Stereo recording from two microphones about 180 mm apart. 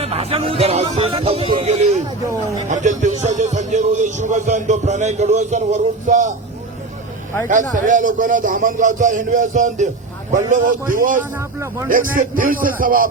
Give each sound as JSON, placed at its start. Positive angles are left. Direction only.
{"t": 0.0, "sound": "a man's voice", "side_deg": -35}
{"t": 2.0, "sound": "speech", "side_deg": -15}
{"t": 2.6, "sound": "a man's voice", "side_deg": -45}
{"t": 7.4, "sound": "a man's voice", "side_deg": -45}
{"t": 11.2, "sound": "speech", "side_deg": -15}
{"t": 11.9, "sound": "a man's voice", "side_deg": -50}